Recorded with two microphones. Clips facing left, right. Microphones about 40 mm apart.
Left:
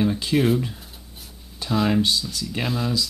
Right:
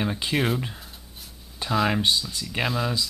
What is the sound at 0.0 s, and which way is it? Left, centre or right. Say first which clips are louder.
Speech: left 5 dB; centre.